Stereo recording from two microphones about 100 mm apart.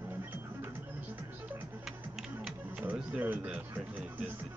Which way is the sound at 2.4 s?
5° right (ahead or behind).